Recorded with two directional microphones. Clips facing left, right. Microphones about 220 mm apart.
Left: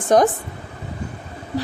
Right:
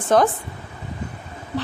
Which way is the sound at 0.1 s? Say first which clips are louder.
Left 2 dB; 15° left (ahead or behind).